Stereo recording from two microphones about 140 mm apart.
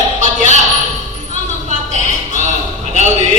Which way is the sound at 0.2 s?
60° right (ahead or behind).